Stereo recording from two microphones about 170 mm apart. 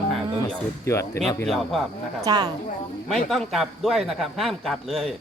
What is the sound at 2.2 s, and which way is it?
Speech, 25° right (ahead or behind).